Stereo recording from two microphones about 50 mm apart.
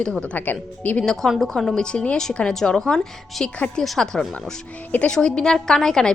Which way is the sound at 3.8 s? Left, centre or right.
Centre.